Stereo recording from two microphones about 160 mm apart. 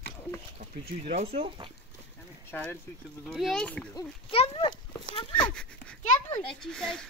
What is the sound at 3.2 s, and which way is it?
Speech, centre (ahead or behind).